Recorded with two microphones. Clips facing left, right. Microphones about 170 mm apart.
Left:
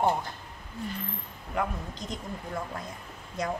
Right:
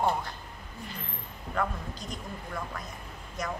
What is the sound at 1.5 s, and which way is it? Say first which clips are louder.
Speech: left 1 dB; 20° left (ahead or behind).